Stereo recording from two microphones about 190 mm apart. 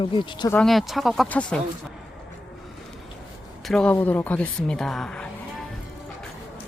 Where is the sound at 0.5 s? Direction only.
Centre (ahead or behind).